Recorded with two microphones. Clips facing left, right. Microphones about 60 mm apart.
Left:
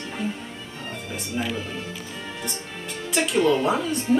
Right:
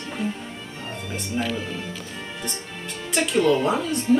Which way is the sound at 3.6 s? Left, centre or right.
Centre.